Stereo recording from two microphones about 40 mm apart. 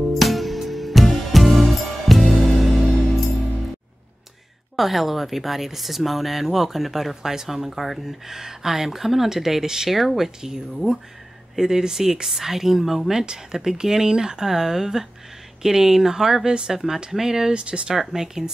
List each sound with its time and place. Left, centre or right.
0.1 s music: centre
4.7 s speech: centre
13.2 s speech: centre
16.7 s speech: centre
17.6 s speech: right
17.9 s speech: centre